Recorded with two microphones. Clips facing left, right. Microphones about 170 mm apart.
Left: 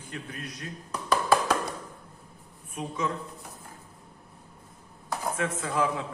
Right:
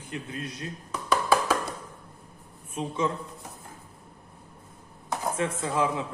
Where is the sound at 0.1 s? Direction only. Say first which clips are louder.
Right 4 dB; 25° right (ahead or behind).